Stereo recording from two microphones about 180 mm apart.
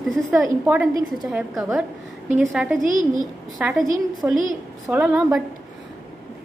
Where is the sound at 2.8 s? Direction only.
45° right (ahead or behind).